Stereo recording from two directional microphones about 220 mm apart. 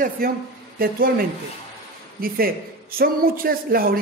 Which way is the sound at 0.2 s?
45° right (ahead or behind).